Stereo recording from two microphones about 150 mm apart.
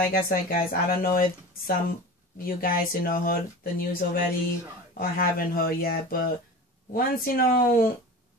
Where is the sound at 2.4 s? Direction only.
75° left (ahead or behind).